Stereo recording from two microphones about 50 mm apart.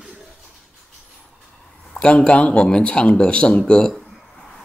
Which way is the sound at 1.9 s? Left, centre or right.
Left.